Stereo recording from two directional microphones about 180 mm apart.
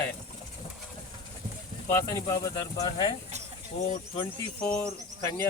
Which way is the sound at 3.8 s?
35° left (ahead or behind).